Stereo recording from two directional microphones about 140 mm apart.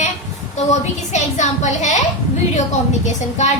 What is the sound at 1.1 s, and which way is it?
Speech, 55° left (ahead or behind).